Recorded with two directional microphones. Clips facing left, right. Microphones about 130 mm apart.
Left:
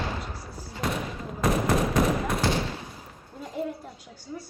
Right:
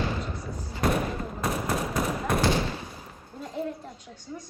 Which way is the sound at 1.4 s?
90° left.